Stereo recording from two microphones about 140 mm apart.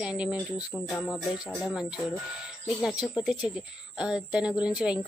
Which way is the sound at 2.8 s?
5° right (ahead or behind).